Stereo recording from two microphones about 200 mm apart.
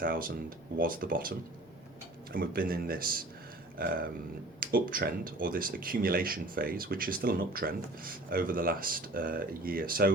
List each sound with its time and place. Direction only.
0.0 s speech: 45° right (ahead or behind)